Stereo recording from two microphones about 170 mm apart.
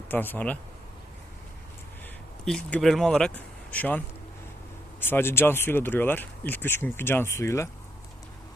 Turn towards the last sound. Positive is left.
turn(degrees=15)  # may be behind; listen again after turning